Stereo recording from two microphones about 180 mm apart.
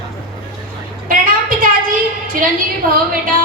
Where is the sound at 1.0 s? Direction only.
50° right (ahead or behind).